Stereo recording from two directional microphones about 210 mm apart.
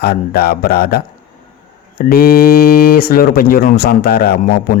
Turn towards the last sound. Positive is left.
turn(degrees=45)  # may be behind; listen again after turning